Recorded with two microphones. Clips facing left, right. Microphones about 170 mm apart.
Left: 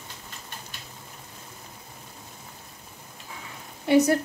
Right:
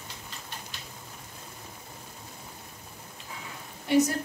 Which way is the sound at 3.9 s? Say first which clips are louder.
Left 4 dB; 65° left (ahead or behind).